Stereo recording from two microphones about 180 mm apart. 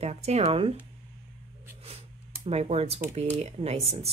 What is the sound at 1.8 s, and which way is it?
Speech, 35° right (ahead or behind).